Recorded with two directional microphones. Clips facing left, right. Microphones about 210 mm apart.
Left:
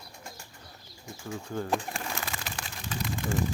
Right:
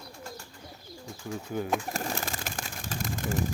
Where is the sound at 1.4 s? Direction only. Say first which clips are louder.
Right 2 dB; 10° right (ahead or behind).